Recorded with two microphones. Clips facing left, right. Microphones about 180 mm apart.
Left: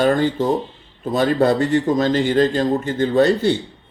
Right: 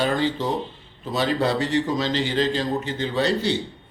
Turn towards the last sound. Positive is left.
turn(degrees=50)  # may be behind; listen again after turning